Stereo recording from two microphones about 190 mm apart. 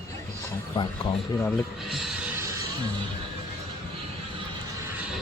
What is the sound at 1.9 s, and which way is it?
Music, centre (ahead or behind).